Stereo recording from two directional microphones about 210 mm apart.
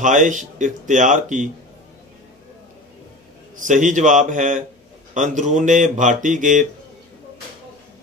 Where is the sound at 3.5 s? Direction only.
35° right (ahead or behind).